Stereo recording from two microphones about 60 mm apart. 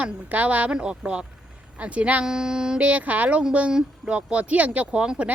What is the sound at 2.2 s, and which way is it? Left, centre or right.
Speech, centre.